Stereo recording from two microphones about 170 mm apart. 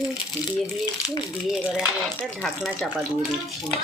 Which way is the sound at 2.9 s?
10° right (ahead or behind).